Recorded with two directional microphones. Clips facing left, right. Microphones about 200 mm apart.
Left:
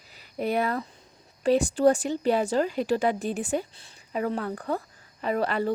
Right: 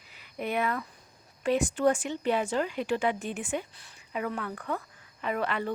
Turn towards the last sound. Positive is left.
turn(degrees=35)  # may be behind; listen again after turning